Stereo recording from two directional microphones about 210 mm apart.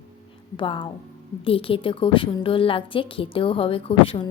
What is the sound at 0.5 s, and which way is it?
A woman's voice, 25° left (ahead or behind).